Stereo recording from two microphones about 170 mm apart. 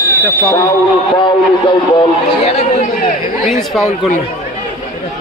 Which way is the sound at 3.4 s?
Centre (ahead or behind).